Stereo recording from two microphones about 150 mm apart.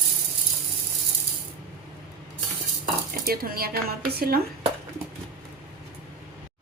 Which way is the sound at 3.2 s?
85° right.